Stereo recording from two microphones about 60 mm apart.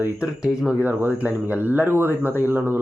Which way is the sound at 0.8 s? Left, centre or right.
Right.